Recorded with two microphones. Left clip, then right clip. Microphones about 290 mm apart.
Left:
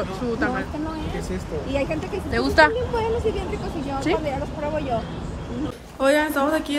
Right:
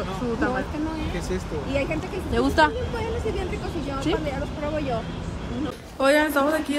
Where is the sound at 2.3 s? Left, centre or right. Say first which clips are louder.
Left 3 dB; centre.